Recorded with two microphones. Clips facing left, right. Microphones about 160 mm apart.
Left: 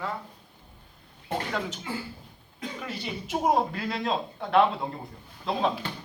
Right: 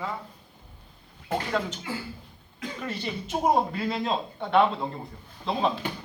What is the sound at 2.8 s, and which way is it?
Speech, centre (ahead or behind).